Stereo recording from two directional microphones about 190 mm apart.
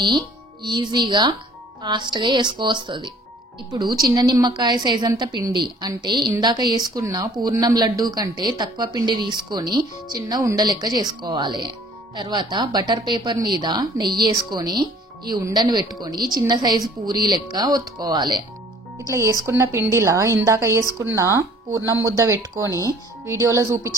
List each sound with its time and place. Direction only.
0.7 s a woman's voice: 25° right (ahead or behind)